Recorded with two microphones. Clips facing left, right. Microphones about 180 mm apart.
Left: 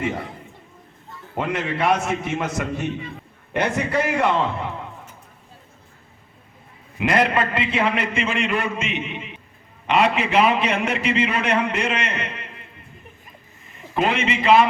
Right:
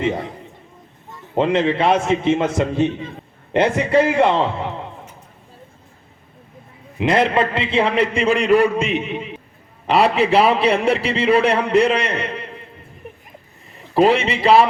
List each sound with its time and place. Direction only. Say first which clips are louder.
1.4 s a man's voice: right 7 dB; 25° right (ahead or behind)
7.0 s a man's voice: right 3 dB; 25° right (ahead or behind)
13.7 s a man's voice: right 7 dB; 35° right (ahead or behind)